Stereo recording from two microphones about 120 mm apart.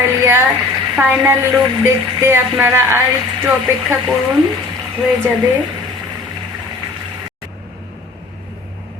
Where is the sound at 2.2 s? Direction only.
20° right (ahead or behind).